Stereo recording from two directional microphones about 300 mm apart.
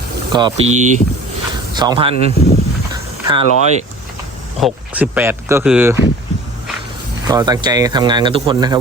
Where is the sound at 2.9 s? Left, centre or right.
Centre.